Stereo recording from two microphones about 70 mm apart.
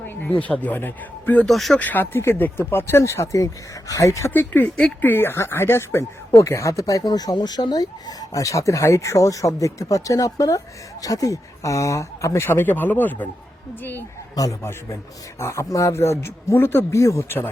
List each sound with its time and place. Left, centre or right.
0.1 s a man's voice: left
1.5 s speech: centre
1.8 s speech: left
3.0 s speech: left
4.3 s speech: left
12.5 s speech: left
14.6 s speech: left
16.9 s speech: left
17.2 s speech: left